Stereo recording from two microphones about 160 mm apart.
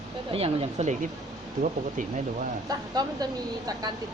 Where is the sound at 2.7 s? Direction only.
25° right (ahead or behind).